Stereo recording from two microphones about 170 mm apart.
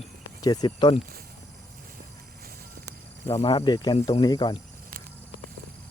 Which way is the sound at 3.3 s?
20° left (ahead or behind).